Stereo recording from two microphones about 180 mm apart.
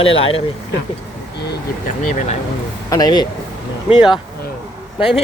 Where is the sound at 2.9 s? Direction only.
20° left (ahead or behind).